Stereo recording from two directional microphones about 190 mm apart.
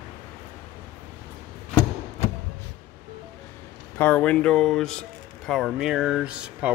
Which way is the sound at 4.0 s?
10° left (ahead or behind).